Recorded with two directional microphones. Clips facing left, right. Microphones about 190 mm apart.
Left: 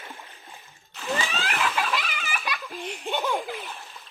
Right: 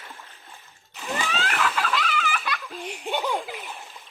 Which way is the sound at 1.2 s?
10° left (ahead or behind).